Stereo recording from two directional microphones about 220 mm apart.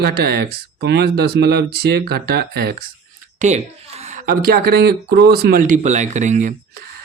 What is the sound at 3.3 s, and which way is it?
A woman's voice, 30° right (ahead or behind).